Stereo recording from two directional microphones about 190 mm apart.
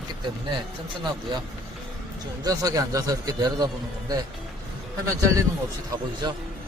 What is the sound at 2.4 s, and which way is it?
Speech, 20° right (ahead or behind).